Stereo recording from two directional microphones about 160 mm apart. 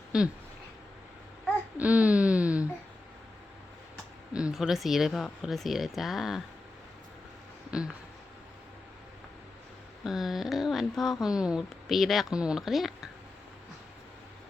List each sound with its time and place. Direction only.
0.1 s speech: 5° right (ahead or behind)
1.8 s a sound: 10° right (ahead or behind)
4.4 s speech: 5° right (ahead or behind)
10.0 s speech: centre (ahead or behind)